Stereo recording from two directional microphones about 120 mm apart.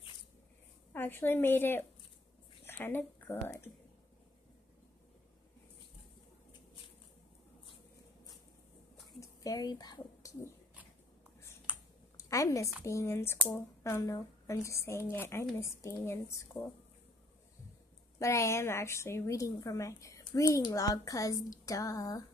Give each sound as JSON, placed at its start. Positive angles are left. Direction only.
{"t": 0.9, "sound": "a woman's voice", "side_deg": 15}
{"t": 9.2, "sound": "speech", "side_deg": 30}
{"t": 11.7, "sound": "typing", "side_deg": -10}
{"t": 12.2, "sound": "a woman's voice", "side_deg": 25}
{"t": 18.2, "sound": "a woman's voice", "side_deg": 25}